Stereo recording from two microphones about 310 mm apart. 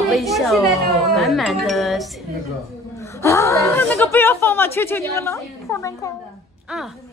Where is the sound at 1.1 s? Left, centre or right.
Centre.